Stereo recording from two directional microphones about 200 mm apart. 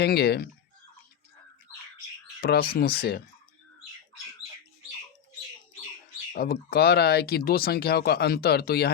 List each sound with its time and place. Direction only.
0.0 s speech: 55° left (ahead or behind)
2.4 s speech: 50° left (ahead or behind)
6.3 s speech: 50° left (ahead or behind)